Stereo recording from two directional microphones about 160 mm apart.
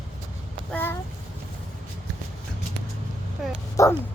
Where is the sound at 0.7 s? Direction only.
15° left (ahead or behind).